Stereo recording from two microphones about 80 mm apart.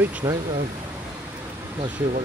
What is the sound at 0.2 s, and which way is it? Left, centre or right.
Speech, right.